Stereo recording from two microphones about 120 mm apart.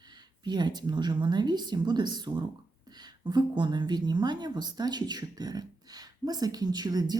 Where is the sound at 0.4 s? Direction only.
35° right (ahead or behind).